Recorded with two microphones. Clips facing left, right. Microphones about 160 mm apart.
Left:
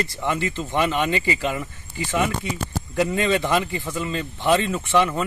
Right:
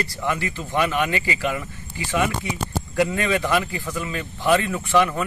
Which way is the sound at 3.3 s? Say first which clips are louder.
Left 1 dB; 20° left (ahead or behind).